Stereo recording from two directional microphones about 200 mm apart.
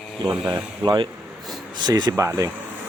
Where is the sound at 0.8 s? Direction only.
25° right (ahead or behind).